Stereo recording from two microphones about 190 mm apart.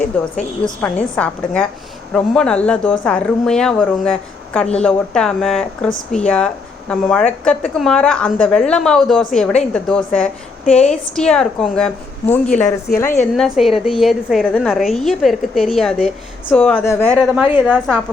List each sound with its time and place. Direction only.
0.6 s a woman's voice: 5° left (ahead or behind)
12.5 s a woman's voice: 40° left (ahead or behind)
13.3 s a woman's voice: centre (ahead or behind)
17.2 s a woman's voice: 5° right (ahead or behind)